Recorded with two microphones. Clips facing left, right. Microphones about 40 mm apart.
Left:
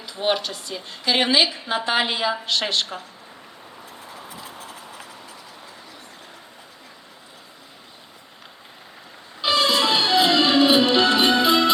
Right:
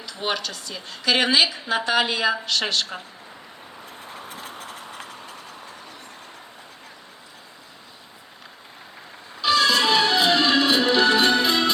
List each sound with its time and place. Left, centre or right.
0.0 s a woman's voice: left
1.7 s a woman's voice: left
3.8 s vehicle: right
9.4 s music: left
10.2 s music: left
10.5 s music: centre